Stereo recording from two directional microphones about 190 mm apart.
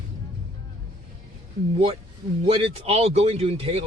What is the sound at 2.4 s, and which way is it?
Speech, 30° right (ahead or behind).